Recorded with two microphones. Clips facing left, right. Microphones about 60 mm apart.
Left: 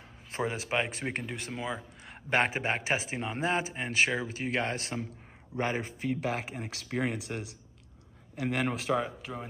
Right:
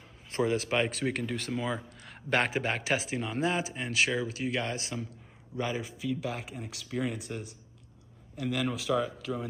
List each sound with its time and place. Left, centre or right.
0.4 s speech: left
8.4 s speech: left